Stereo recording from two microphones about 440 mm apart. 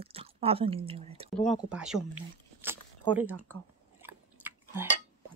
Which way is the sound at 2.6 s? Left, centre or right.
Centre.